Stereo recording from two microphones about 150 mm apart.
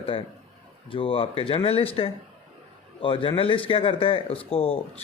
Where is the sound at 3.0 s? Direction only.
35° left (ahead or behind).